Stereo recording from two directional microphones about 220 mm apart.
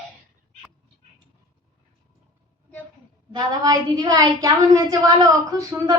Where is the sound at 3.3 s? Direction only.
20° right (ahead or behind).